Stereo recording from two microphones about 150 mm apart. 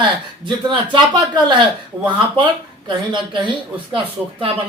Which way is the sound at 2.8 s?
30° right (ahead or behind).